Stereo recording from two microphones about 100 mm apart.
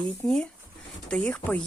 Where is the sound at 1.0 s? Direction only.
10° left (ahead or behind).